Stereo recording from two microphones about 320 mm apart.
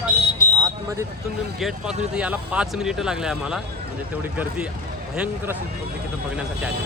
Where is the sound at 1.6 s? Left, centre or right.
Centre.